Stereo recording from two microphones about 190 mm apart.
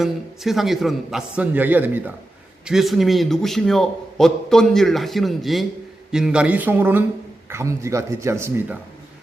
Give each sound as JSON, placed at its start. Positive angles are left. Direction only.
{"t": 0.0, "sound": "a man's voice", "side_deg": 0}